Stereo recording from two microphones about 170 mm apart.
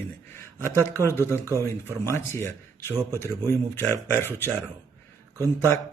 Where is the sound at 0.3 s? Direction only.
15° left (ahead or behind).